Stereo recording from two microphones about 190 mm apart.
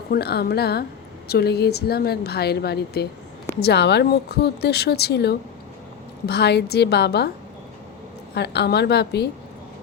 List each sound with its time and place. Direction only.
0.1 s a woman's voice: 55° left (ahead or behind)
8.4 s a woman's voice: 60° left (ahead or behind)